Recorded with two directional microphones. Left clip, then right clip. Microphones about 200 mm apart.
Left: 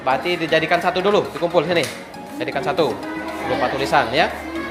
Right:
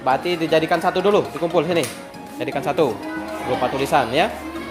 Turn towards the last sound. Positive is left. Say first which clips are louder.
# left 1 dB
turn(degrees=-35)  # may be behind; listen again after turning